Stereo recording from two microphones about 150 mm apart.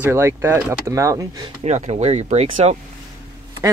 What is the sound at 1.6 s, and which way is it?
Speech, 45° right (ahead or behind).